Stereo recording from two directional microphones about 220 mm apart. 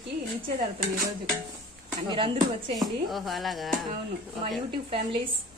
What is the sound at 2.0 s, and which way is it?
Speech, 20° right (ahead or behind).